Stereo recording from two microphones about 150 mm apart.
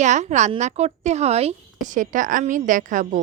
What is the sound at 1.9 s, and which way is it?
Speech, 60° right (ahead or behind).